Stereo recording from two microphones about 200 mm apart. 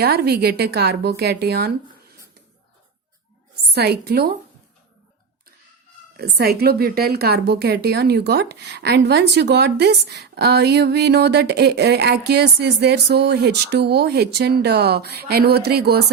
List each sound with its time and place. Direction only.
0.0 s speech: 50° right (ahead or behind)
3.7 s speech: 55° right (ahead or behind)
6.1 s a woman's voice: 50° right (ahead or behind)